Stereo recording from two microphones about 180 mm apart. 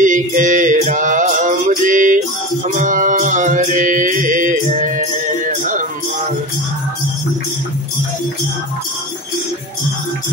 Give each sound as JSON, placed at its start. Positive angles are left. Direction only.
{"t": 0.0, "sound": "mantra", "side_deg": -45}
{"t": 2.7, "sound": "music", "side_deg": -45}